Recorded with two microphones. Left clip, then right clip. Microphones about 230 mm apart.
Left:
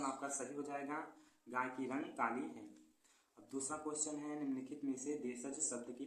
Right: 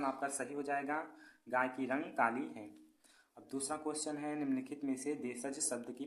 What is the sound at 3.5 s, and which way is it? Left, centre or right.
A man's voice, right.